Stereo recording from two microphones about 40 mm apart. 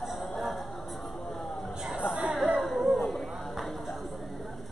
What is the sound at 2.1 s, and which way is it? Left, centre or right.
Chatter, centre.